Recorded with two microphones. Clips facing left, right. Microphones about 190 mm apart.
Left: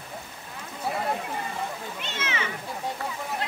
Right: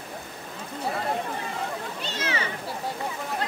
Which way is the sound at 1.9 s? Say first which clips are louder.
Right 3 dB; 35° right (ahead or behind).